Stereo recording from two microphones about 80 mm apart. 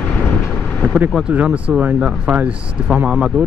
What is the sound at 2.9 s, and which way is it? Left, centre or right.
Speech, centre.